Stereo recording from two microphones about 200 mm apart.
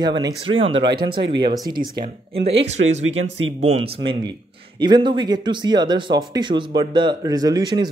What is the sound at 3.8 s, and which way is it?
Speech, 25° right (ahead or behind).